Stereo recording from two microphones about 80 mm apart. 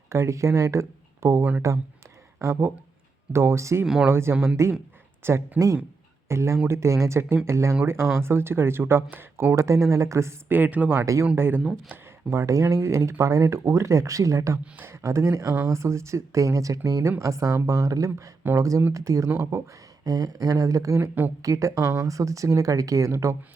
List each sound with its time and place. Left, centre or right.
0.1 s speech: right
9.6 s speech: right
10.6 s speech: right
11.0 s speech: right
11.3 s speech: right
12.3 s speech: right
20.1 s speech: right